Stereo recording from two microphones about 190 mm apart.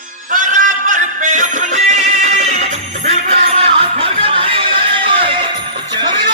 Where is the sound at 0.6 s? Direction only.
40° right (ahead or behind).